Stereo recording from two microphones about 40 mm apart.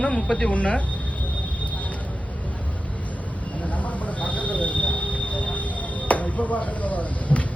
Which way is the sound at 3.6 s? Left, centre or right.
Left.